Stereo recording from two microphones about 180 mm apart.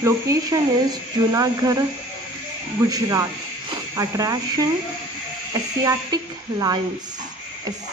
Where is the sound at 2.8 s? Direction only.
20° right (ahead or behind).